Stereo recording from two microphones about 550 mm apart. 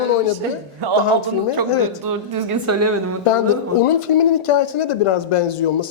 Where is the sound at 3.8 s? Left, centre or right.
Left.